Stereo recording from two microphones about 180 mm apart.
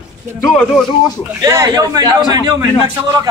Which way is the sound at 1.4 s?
20° right (ahead or behind).